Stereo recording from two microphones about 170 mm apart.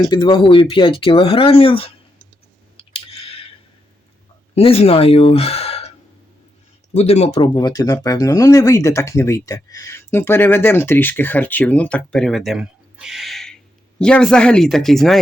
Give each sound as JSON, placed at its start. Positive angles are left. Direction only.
{"t": 0.0, "sound": "speech", "side_deg": 25}
{"t": 2.7, "sound": "clicking", "side_deg": 35}
{"t": 4.5, "sound": "speech", "side_deg": 35}
{"t": 6.9, "sound": "speech", "side_deg": 40}
{"t": 7.4, "sound": "speech", "side_deg": 25}